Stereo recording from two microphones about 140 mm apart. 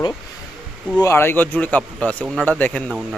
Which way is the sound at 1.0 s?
15° left (ahead or behind).